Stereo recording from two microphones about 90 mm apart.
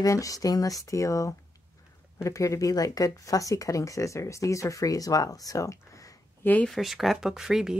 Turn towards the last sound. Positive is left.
turn(degrees=-5)  # may be behind; listen again after turning